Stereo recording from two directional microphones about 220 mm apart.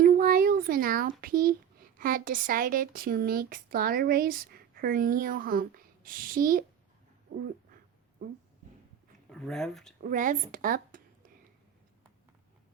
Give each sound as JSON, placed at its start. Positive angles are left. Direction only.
{"t": 0.0, "sound": "a sound", "side_deg": -40}
{"t": 1.2, "sound": "speech", "side_deg": -40}
{"t": 9.3, "sound": "speech", "side_deg": 0}
{"t": 10.0, "sound": "speech", "side_deg": -35}